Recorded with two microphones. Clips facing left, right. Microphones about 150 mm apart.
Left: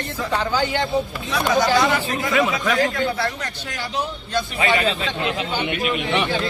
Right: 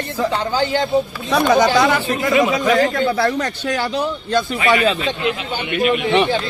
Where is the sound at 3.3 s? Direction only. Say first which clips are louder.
Right 10 dB; 70° right (ahead or behind).